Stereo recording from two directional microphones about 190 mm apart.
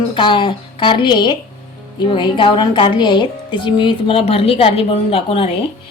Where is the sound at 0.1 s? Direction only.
25° left (ahead or behind).